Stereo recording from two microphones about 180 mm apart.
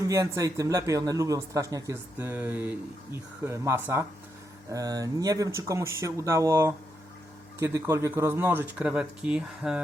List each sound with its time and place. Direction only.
0.1 s speech: 15° right (ahead or behind)